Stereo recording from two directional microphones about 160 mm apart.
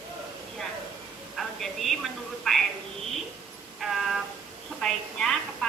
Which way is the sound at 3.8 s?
Centre (ahead or behind).